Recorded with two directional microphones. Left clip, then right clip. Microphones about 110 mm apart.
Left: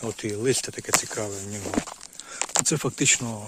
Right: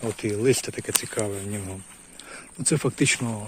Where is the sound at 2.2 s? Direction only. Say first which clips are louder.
Left 4 dB; 15° left (ahead or behind).